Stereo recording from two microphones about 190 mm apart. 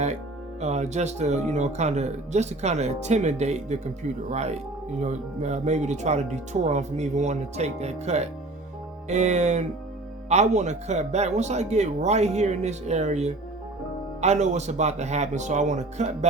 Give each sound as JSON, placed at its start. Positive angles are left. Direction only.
{"t": 0.6, "sound": "speech", "side_deg": -35}